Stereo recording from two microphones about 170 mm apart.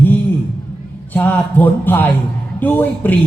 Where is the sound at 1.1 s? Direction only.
10° left (ahead or behind).